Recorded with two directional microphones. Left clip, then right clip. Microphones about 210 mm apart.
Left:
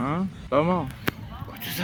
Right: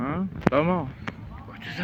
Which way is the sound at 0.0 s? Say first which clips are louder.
Right 2 dB; 15° left (ahead or behind).